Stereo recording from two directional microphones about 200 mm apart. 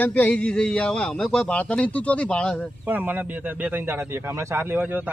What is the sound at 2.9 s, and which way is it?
Speech, 10° right (ahead or behind).